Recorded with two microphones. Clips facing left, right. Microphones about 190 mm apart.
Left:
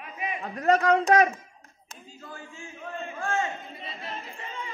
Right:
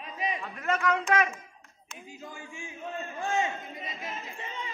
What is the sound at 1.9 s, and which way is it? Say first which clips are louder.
A man's voice: even; 15° right (ahead or behind).